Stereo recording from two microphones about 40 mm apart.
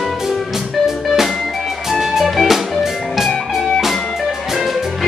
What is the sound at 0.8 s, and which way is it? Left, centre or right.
Music, centre.